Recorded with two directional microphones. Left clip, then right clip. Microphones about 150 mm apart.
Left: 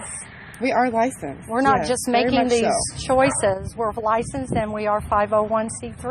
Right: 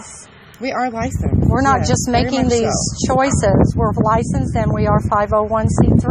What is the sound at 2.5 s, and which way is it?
Speech, 45° right (ahead or behind).